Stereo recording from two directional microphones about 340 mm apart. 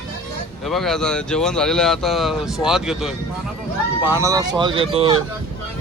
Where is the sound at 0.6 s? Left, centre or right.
Centre.